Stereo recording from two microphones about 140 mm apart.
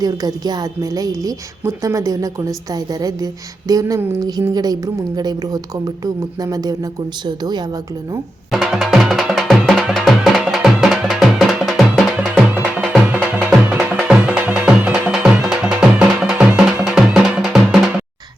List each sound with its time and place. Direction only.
0.0 s a woman's voice: 25° right (ahead or behind)
8.5 s music: centre (ahead or behind)